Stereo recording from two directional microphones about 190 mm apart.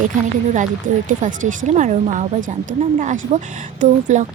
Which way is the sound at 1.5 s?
40° right (ahead or behind).